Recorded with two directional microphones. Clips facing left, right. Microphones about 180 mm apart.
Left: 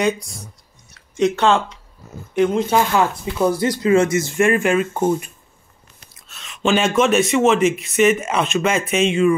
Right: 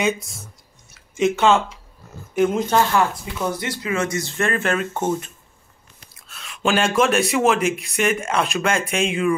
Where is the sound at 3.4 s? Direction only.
35° left (ahead or behind).